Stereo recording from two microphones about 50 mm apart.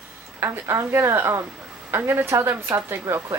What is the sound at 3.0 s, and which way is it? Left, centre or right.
Speech, right.